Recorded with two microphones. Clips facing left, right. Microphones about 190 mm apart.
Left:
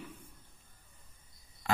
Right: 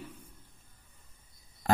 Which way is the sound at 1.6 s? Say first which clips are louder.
Right 5 dB; 40° right (ahead or behind).